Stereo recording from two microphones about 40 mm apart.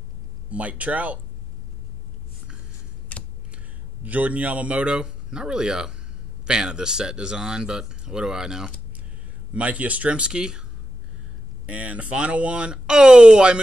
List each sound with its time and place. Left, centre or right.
0.5 s speech: right
4.0 s speech: right
4.9 s speech: centre
9.5 s speech: right; by 10.6 s centre
11.6 s speech: right
12.7 s speech: right